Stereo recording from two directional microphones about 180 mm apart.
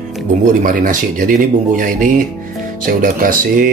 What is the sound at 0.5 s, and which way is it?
Speech, 45° right (ahead or behind).